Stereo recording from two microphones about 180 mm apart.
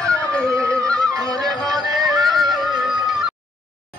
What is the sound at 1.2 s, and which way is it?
Music, 20° right (ahead or behind).